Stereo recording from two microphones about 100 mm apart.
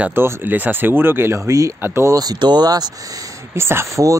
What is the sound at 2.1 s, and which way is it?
Speech, 45° right (ahead or behind).